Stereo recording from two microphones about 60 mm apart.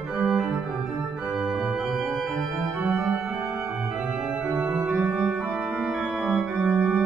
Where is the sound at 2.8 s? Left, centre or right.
Right.